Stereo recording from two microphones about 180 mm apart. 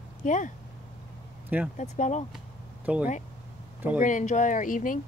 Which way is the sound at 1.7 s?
40° left (ahead or behind).